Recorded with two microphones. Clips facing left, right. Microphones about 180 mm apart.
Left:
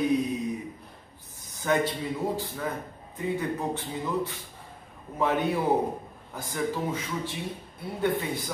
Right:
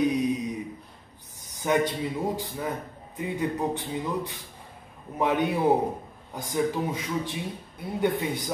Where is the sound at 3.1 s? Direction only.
15° right (ahead or behind).